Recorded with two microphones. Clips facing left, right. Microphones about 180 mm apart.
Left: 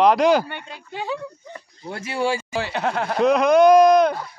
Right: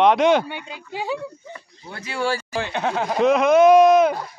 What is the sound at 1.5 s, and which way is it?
Speech, 30° left (ahead or behind).